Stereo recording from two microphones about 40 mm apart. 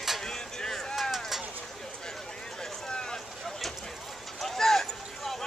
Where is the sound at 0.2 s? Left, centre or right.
Centre.